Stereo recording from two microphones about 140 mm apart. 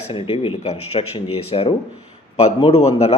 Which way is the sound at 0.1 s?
45° left (ahead or behind).